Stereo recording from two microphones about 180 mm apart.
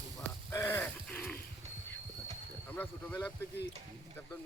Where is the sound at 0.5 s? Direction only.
15° left (ahead or behind).